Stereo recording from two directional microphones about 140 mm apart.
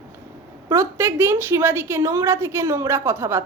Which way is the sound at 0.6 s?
20° right (ahead or behind).